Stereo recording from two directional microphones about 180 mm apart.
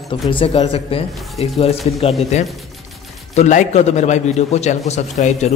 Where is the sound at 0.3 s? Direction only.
30° left (ahead or behind).